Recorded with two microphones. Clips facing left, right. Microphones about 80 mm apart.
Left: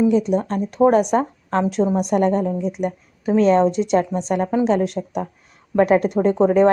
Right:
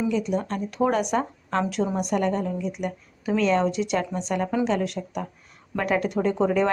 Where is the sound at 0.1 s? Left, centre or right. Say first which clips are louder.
Left 7 dB; left.